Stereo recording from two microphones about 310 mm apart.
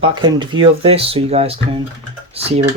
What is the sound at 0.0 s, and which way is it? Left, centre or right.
Speech, centre.